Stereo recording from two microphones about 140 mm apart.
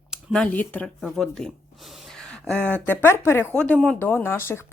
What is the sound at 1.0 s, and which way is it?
A woman's voice, centre (ahead or behind).